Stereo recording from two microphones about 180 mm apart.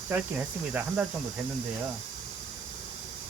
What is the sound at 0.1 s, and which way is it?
Speech, 10° right (ahead or behind).